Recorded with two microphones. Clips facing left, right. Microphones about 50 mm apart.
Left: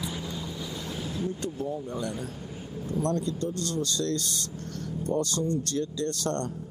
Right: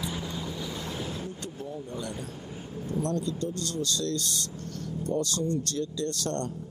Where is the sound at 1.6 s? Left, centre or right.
Left.